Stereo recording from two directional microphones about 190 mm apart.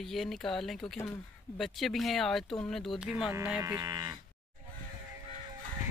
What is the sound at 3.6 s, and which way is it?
Cattle, 20° right (ahead or behind).